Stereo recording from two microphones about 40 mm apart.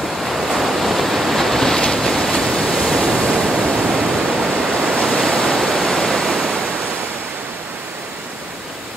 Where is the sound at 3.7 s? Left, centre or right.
Right.